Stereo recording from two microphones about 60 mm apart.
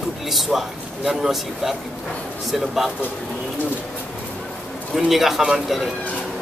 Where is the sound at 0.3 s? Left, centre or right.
Centre.